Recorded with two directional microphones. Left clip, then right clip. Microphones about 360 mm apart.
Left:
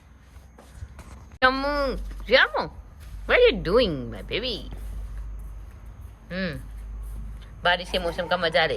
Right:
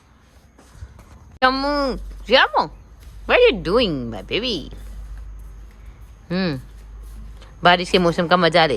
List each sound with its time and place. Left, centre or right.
1.4 s speech: centre
6.2 s speech: centre